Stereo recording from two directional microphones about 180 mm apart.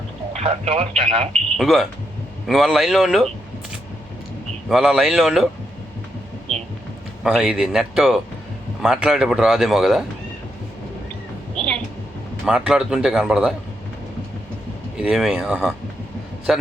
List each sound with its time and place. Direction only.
0.3 s speech: 35° right (ahead or behind)
1.3 s a man's voice: centre (ahead or behind)
4.7 s a man's voice: centre (ahead or behind)
7.3 s a man's voice: 5° right (ahead or behind)
12.5 s a man's voice: 5° right (ahead or behind)
14.9 s a man's voice: centre (ahead or behind)